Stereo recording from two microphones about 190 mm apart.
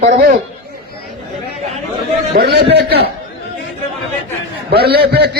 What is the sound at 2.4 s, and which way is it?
Speech, 55° right (ahead or behind).